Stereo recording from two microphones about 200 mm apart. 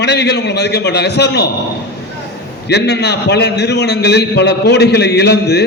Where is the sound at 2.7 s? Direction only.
55° left (ahead or behind).